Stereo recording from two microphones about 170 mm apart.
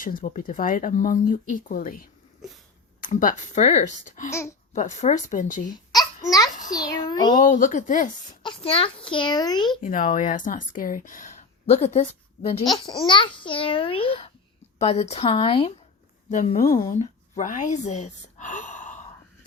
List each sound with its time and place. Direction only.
0.0 s speech: 55° left (ahead or behind)
4.3 s speech: 15° left (ahead or behind)
4.7 s speech: 45° left (ahead or behind)
6.7 s a child's voice: 20° left (ahead or behind)
7.3 s speech: 50° left (ahead or behind)
8.4 s a child's voice: 30° left (ahead or behind)
9.8 s speech: 50° left (ahead or behind)
11.6 s a woman's voice: 40° left (ahead or behind)
12.6 s a child's voice: 25° left (ahead or behind)
16.3 s speech: 45° left (ahead or behind)